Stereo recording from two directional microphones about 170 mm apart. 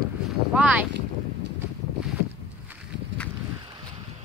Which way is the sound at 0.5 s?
10° right (ahead or behind).